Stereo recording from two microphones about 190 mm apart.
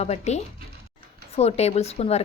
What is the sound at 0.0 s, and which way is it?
Speech, 35° left (ahead or behind).